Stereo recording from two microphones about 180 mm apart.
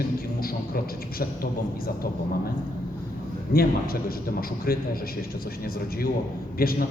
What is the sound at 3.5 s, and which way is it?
A man's voice, 55° left (ahead or behind).